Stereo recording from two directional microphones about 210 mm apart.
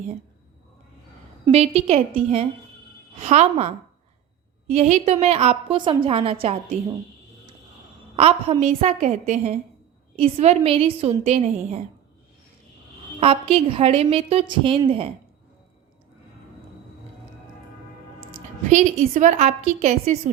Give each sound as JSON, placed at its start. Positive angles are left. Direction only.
{"t": 1.5, "sound": "a woman's voice", "side_deg": -30}
{"t": 4.7, "sound": "a woman's voice", "side_deg": -30}
{"t": 8.1, "sound": "a woman's voice", "side_deg": -30}
{"t": 13.1, "sound": "a woman's voice", "side_deg": -25}
{"t": 18.7, "sound": "a woman's voice", "side_deg": -35}